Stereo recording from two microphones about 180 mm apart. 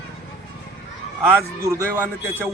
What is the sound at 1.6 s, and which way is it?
Speech, 20° right (ahead or behind).